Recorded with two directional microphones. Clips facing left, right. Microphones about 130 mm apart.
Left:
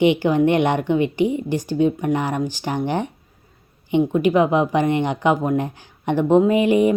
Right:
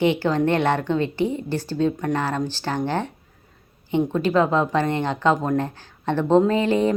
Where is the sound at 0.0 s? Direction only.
15° left (ahead or behind).